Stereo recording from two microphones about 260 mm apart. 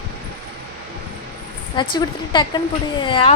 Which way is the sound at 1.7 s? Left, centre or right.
Centre.